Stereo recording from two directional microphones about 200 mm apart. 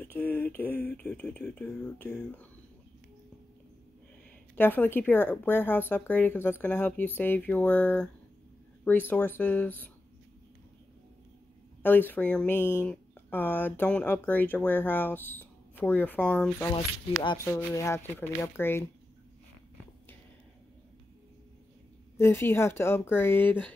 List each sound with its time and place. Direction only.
0.0 s speech: 10° left (ahead or behind)
4.6 s speech: 10° left (ahead or behind)
11.8 s speech: 10° left (ahead or behind)
17.2 s speech: 25° left (ahead or behind)
22.1 s speech: 15° left (ahead or behind)